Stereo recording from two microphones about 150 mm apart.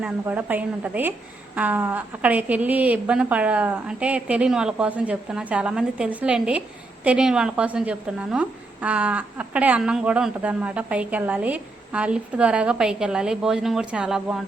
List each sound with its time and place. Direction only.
0.0 s a woman's voice: 10° right (ahead or behind)